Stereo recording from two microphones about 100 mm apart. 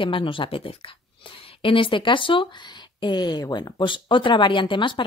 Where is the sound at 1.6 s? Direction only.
60° left (ahead or behind).